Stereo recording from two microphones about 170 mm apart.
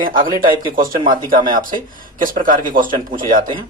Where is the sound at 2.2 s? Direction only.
55° right (ahead or behind).